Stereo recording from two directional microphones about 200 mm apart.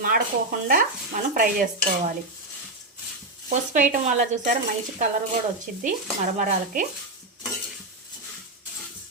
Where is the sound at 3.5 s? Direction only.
40° right (ahead or behind).